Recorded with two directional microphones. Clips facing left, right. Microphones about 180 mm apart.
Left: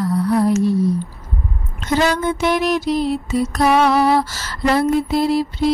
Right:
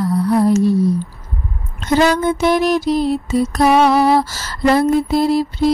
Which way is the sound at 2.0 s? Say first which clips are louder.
Right 4 dB; 40° right (ahead or behind).